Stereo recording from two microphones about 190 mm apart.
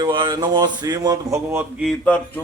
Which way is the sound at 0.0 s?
25° right (ahead or behind).